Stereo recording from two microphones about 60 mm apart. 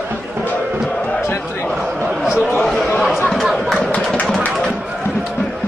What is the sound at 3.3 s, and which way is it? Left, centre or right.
Music, centre.